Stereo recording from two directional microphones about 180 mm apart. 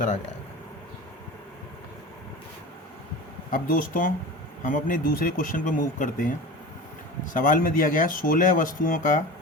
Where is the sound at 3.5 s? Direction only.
50° left (ahead or behind).